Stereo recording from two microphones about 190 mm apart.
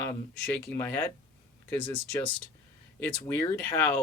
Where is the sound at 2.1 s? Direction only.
5° left (ahead or behind).